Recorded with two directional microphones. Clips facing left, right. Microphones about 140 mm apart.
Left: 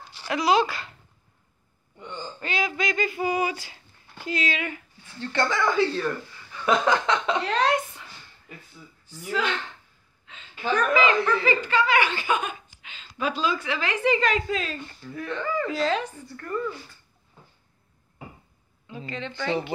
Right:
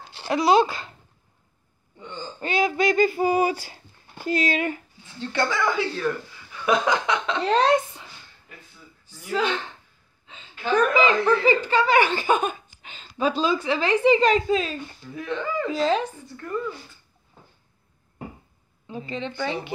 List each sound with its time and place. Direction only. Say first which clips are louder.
0.0 s speech: right 3 dB; 25° right (ahead or behind)
2.4 s speech: right 6 dB; 35° right (ahead or behind)
5.0 s speech: right 1 dB; 15° right (ahead or behind)
7.4 s speech: right 4 dB; 30° right (ahead or behind)
9.3 s speech: right 3 dB; 25° right (ahead or behind)
10.2 s a sound: right 1 dB; 25° right (ahead or behind)
11.0 s speech: right 2 dB; 30° right (ahead or behind)
13.4 s speech: right 3 dB; 30° right (ahead or behind)
18.9 s speech: right 3 dB; 25° right (ahead or behind)